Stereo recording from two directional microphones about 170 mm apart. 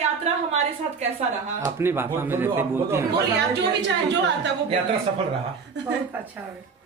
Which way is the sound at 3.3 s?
90° right.